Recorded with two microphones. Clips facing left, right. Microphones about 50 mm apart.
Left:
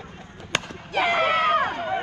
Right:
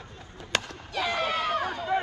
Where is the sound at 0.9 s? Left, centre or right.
Left.